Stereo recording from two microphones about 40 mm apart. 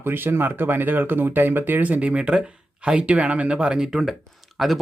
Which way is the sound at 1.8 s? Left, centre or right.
Right.